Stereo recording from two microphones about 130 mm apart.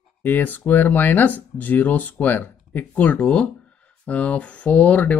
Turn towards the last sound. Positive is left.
turn(degrees=10)  # may be behind; listen again after turning